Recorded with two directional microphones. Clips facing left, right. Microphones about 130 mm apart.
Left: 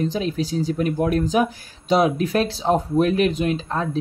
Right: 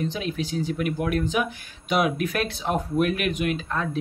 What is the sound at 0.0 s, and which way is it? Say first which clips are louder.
Speech: left 5 dB; 35° left (ahead or behind).